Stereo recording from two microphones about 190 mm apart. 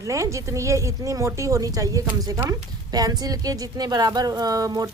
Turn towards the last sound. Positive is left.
turn(degrees=-20)  # may be behind; listen again after turning